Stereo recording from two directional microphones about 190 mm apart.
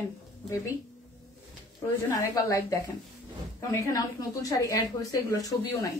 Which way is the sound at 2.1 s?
20° left (ahead or behind).